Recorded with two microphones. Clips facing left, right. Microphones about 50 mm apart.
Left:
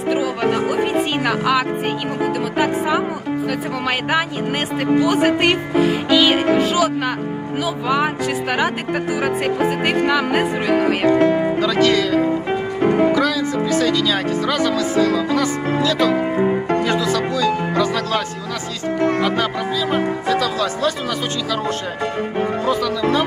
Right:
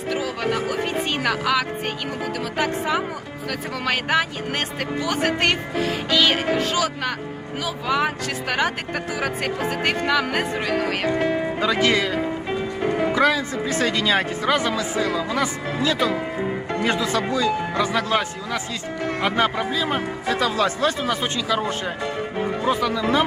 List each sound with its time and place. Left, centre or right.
0.1 s speech: centre
11.6 s speech: centre
12.8 s music: left
13.1 s speech: right
19.2 s speech: centre
22.6 s speech: centre